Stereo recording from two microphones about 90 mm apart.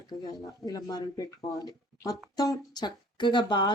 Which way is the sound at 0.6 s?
45° left (ahead or behind).